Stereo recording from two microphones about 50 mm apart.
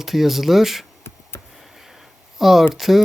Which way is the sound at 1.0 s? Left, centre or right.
Left.